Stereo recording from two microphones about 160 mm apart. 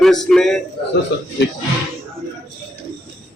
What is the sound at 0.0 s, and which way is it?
Speech, centre (ahead or behind).